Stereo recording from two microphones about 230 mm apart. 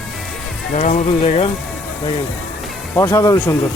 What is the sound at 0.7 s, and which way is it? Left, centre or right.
Speech, left.